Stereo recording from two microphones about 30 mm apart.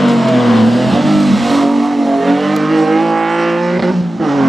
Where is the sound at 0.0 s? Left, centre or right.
Centre.